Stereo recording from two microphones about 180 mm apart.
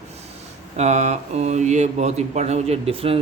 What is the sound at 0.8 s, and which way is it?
Speech, 40° right (ahead or behind).